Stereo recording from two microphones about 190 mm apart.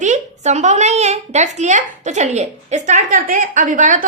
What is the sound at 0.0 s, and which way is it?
A woman's voice, 40° right (ahead or behind).